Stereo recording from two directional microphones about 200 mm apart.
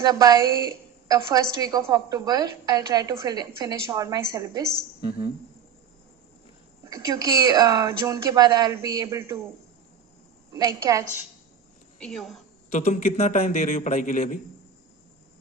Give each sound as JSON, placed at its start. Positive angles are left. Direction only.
{"t": 0.0, "sound": "a woman's voice", "side_deg": -20}
{"t": 6.8, "sound": "speech", "side_deg": -15}
{"t": 10.5, "sound": "speech", "side_deg": -15}
{"t": 11.9, "sound": "a woman's voice", "side_deg": 0}
{"t": 12.7, "sound": "a man's voice", "side_deg": 35}